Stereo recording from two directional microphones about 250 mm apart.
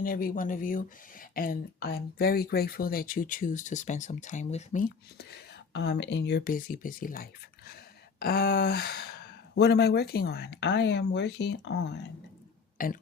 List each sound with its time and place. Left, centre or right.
0.0 s speech: left